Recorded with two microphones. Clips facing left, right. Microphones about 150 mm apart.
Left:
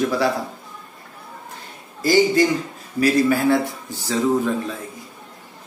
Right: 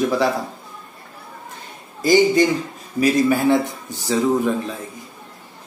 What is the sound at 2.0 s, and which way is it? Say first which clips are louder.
A man's voice: right 2 dB; 20° right (ahead or behind).